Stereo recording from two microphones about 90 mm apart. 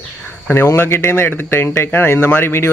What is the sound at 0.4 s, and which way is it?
Speech, 25° left (ahead or behind).